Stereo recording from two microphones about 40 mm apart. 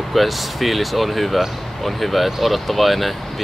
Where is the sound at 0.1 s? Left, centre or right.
Centre.